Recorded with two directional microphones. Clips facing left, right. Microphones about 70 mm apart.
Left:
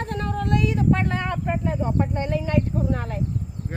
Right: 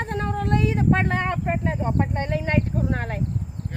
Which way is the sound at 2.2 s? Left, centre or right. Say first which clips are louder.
Even; right.